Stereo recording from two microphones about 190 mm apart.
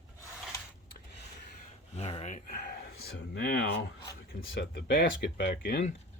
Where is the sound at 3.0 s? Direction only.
60° left (ahead or behind); by 4.6 s 75° left (ahead or behind).